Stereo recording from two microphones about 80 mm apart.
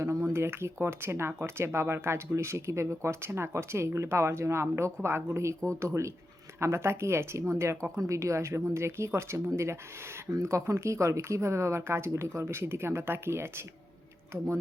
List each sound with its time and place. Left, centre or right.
0.0 s speech: right